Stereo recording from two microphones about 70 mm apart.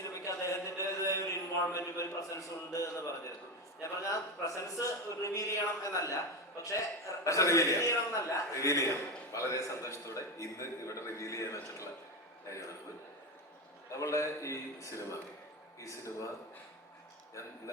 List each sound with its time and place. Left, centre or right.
0.0 s a sound: left
3.8 s a man's voice: left
13.9 s a man's voice: left